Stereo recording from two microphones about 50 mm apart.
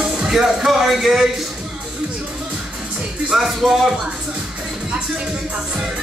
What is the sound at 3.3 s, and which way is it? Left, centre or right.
Speech, centre.